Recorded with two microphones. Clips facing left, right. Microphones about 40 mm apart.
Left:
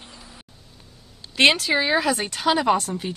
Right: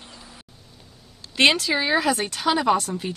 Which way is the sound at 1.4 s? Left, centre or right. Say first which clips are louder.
Left 1 dB; centre.